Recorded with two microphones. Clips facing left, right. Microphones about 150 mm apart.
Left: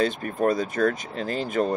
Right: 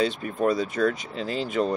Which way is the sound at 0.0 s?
45° left (ahead or behind).